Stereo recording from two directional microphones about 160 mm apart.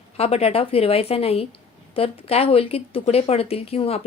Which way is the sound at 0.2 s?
40° left (ahead or behind).